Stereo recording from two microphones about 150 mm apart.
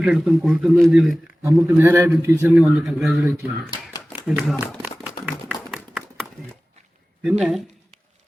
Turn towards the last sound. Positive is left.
turn(degrees=0)  # may be behind; listen again after turning